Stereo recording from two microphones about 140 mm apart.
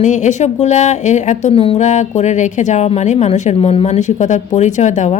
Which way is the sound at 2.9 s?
45° left (ahead or behind).